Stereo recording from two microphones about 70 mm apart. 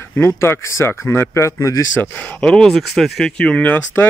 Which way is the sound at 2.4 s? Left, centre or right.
Centre.